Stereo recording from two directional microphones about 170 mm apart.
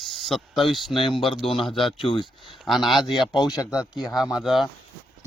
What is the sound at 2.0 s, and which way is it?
Speech, 30° left (ahead or behind).